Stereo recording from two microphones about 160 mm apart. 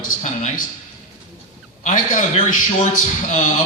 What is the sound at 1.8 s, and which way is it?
A man's voice, 50° left (ahead or behind).